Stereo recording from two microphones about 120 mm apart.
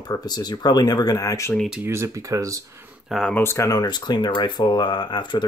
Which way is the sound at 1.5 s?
5° right (ahead or behind).